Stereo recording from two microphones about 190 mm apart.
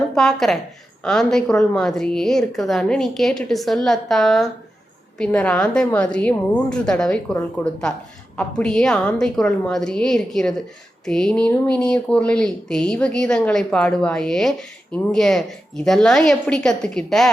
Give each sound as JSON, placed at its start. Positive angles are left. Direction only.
{"t": 0.1, "sound": "speech", "side_deg": 0}